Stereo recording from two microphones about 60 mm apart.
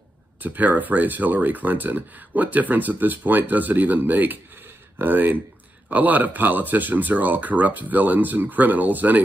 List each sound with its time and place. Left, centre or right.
0.4 s speech: right